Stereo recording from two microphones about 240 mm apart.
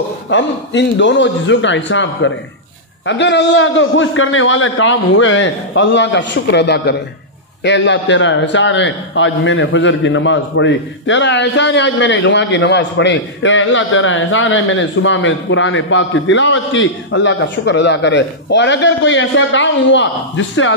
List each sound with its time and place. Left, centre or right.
0.3 s a man's voice: left